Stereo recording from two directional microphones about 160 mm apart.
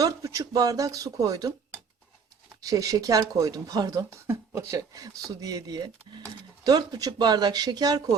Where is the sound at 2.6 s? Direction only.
20° right (ahead or behind).